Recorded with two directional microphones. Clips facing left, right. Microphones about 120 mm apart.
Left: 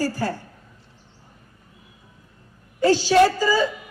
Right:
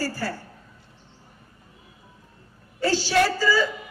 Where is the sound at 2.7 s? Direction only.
15° left (ahead or behind).